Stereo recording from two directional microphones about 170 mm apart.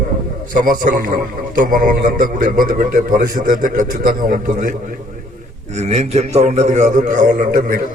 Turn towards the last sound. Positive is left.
turn(degrees=-55)  # may be behind; listen again after turning